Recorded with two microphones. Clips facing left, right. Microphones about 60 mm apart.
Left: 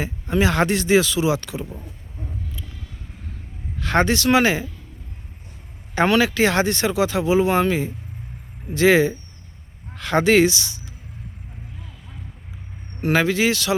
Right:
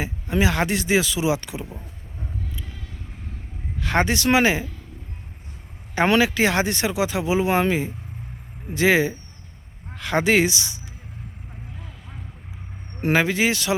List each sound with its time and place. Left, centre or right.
0.0 s speech: centre
3.8 s speech: centre
5.9 s speech: centre
13.0 s speech: right